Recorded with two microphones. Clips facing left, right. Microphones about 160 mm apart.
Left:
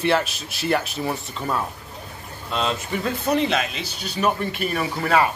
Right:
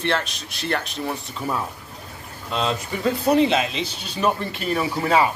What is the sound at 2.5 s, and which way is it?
Speech, 25° right (ahead or behind).